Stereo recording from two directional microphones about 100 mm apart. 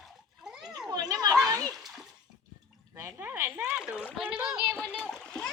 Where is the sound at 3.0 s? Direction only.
20° right (ahead or behind).